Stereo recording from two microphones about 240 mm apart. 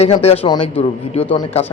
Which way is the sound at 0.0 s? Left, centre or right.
Left.